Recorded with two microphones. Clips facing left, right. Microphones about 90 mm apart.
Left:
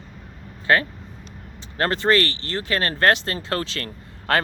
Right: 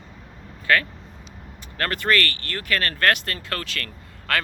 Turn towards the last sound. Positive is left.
turn(degrees=30)  # may be behind; listen again after turning